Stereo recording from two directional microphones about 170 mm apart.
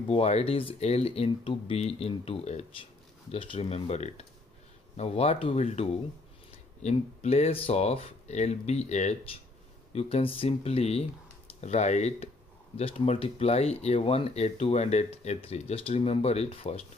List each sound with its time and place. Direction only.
0.1 s speech: 40° left (ahead or behind)